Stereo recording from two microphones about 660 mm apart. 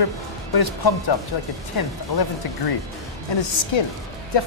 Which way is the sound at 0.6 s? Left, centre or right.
Left.